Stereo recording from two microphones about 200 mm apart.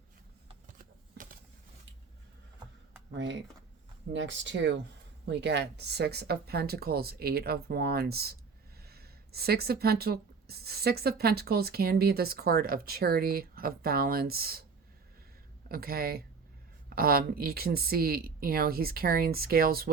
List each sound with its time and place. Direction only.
4.1 s speech: 65° right (ahead or behind); by 14.6 s 50° right (ahead or behind)
15.7 s speech: 50° right (ahead or behind)